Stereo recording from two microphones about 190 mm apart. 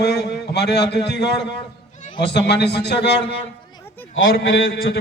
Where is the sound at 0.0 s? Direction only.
60° left (ahead or behind).